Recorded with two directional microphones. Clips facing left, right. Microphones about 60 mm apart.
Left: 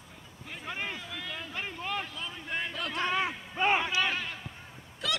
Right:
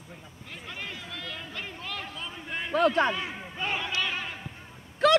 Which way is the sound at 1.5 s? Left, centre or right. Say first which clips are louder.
Left 2 dB; centre.